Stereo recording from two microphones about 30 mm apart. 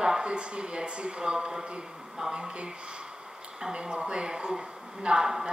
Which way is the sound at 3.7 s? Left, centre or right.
Right.